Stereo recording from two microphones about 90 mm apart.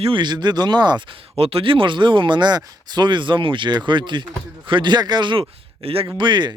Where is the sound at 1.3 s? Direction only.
90° right.